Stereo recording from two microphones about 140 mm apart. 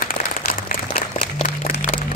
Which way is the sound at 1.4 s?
70° left (ahead or behind).